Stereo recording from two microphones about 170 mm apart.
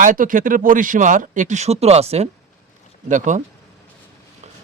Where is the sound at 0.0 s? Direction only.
50° right (ahead or behind).